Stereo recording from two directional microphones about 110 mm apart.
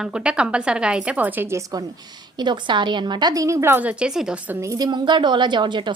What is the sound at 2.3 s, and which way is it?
A woman's voice, 45° right (ahead or behind).